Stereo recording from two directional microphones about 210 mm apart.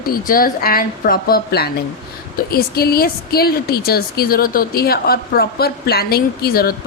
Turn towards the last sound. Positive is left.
turn(degrees=45)  # may be behind; listen again after turning